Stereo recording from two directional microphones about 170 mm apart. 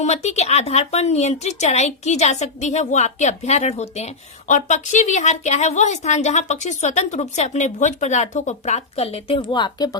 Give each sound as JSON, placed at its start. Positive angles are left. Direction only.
{"t": 0.0, "sound": "speech", "side_deg": 40}